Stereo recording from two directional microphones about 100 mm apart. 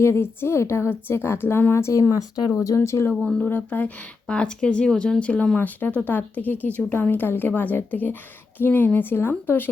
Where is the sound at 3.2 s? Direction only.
10° left (ahead or behind).